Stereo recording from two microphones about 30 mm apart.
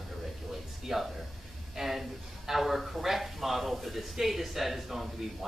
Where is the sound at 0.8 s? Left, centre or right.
Centre.